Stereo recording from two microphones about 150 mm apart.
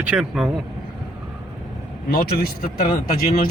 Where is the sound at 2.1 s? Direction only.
90° left.